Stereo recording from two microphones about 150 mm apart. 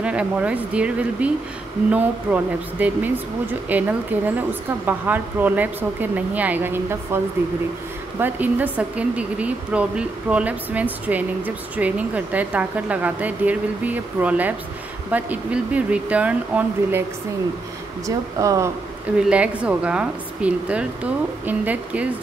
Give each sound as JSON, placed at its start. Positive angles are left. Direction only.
{"t": 0.0, "sound": "a woman's voice", "side_deg": -5}
{"t": 8.2, "sound": "a woman's voice", "side_deg": -10}
{"t": 18.0, "sound": "speech", "side_deg": -20}
{"t": 19.1, "sound": "a woman's voice", "side_deg": -5}